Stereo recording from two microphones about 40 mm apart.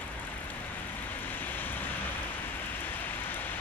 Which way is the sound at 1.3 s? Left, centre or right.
Left.